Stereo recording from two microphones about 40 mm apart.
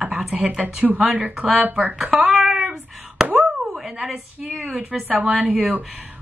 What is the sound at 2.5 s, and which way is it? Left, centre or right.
Child singing, centre.